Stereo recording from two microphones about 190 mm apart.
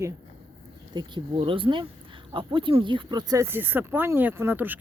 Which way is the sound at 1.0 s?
25° right (ahead or behind).